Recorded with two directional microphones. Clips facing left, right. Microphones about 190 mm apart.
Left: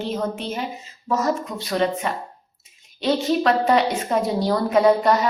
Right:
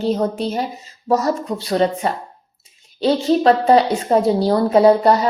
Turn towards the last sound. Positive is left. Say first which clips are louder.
# right 4 dB
turn(degrees=-35)  # may be behind; listen again after turning